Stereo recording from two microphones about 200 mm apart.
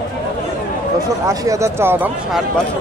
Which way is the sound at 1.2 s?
15° right (ahead or behind).